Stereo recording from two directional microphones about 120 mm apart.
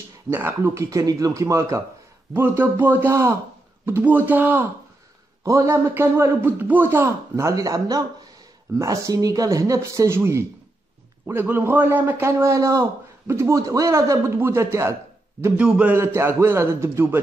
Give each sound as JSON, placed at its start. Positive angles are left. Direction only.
{"t": 0.3, "sound": "a man's voice", "side_deg": -20}
{"t": 5.4, "sound": "a man's voice", "side_deg": -25}
{"t": 15.4, "sound": "a man's voice", "side_deg": -10}